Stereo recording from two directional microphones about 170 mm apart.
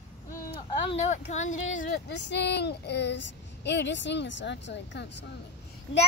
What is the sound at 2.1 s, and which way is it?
Speech, 90° left.